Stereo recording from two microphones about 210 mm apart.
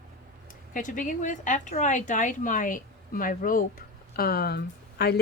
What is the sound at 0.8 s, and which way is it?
A woman's voice, 40° left (ahead or behind).